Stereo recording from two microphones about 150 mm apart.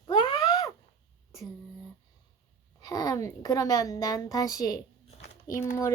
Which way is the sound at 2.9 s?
25° left (ahead or behind).